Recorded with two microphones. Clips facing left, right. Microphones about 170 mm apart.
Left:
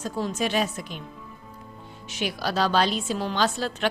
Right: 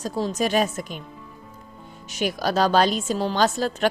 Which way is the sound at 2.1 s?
45° right (ahead or behind).